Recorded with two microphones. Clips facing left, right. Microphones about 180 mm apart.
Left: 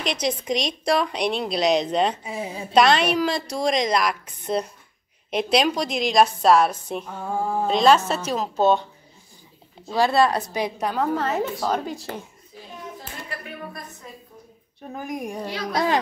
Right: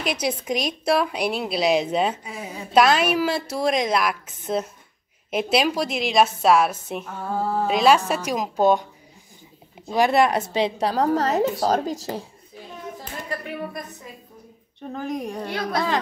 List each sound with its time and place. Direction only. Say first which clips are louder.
0.0 s a woman's voice: even; 5° right (ahead or behind)
2.2 s a woman's voice: left 3 dB; 25° left (ahead or behind)
2.7 s a woman's voice: even; 5° right (ahead or behind)
7.1 s a woman's voice: right 1 dB; 15° left (ahead or behind)
7.6 s a woman's voice: left 1 dB; 10° right (ahead or behind); by 12.3 s 40° right (ahead or behind)
14.8 s a woman's voice: right 2 dB; 10° left (ahead or behind)